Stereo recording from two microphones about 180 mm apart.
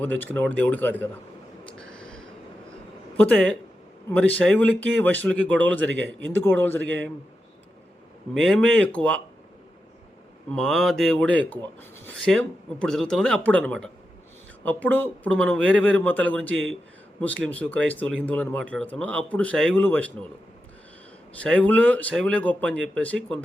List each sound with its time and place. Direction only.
0.2 s speech: 10° left (ahead or behind)
1.6 s a sound: 5° left (ahead or behind)
3.2 s speech: 10° left (ahead or behind)
5.9 s speech: 90° right
6.4 s speech: 10° left (ahead or behind)
8.3 s a man's voice: 5° left (ahead or behind)
10.5 s a man's voice: centre (ahead or behind)
16.5 s speech: 90° right
17.2 s speech: 5° left (ahead or behind)
21.4 s speech: 5° left (ahead or behind)